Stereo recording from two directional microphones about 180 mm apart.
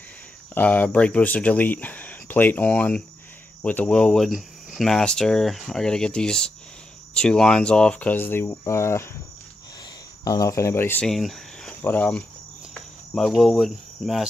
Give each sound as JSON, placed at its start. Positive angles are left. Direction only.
{"t": 0.6, "sound": "speech", "side_deg": 10}
{"t": 10.2, "sound": "speech", "side_deg": 20}
{"t": 11.1, "sound": "speech", "side_deg": 0}
{"t": 12.7, "sound": "cricket", "side_deg": 0}